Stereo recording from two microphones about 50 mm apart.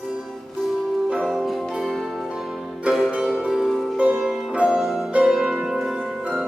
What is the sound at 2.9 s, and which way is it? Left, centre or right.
Music, right.